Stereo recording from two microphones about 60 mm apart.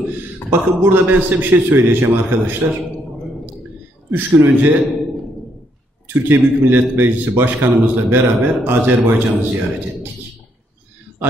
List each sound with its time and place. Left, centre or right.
0.5 s a man's voice: right
4.1 s a man's voice: right
6.0 s a man's voice: right